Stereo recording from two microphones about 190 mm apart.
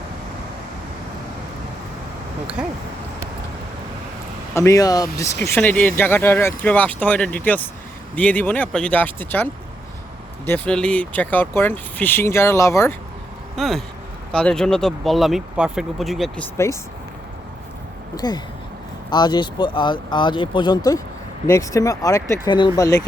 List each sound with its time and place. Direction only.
2.6 s speech: 5° right (ahead or behind)
4.5 s speech: 15° left (ahead or behind)
13.6 s speech: centre (ahead or behind)
18.2 s speech: 20° left (ahead or behind)